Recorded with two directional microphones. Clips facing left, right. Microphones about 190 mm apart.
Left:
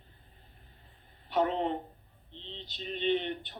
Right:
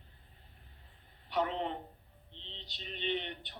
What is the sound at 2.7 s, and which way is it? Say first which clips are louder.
Speech: left 7 dB; 40° left (ahead or behind).